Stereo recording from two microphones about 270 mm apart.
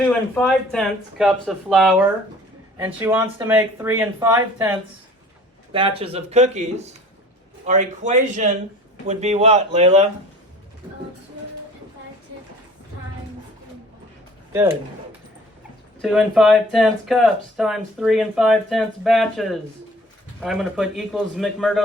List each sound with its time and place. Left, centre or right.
0.0 s speech: centre
5.7 s speech: centre
14.5 s speech: centre
16.0 s speech: centre